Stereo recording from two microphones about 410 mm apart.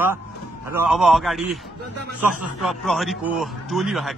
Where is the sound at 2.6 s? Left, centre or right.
Centre.